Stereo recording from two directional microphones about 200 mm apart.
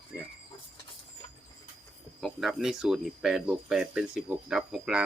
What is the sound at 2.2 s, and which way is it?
Speech, centre (ahead or behind).